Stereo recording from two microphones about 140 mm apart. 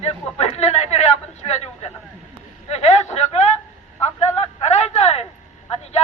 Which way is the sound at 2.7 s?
50° left (ahead or behind).